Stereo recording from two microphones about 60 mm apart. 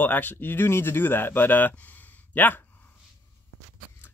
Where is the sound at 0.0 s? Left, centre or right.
Left.